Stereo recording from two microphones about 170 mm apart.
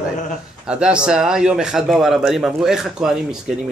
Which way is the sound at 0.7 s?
5° right (ahead or behind).